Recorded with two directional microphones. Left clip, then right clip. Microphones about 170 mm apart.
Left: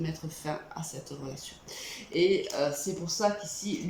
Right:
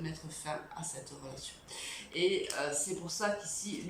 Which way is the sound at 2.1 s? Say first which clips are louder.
Left 6 dB; 35° left (ahead or behind).